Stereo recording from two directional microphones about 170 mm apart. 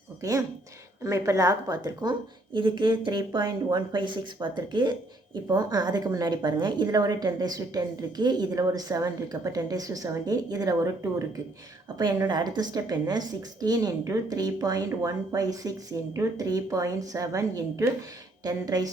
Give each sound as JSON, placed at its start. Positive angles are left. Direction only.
{"t": 0.2, "sound": "speech", "side_deg": -20}
{"t": 11.9, "sound": "speech", "side_deg": -25}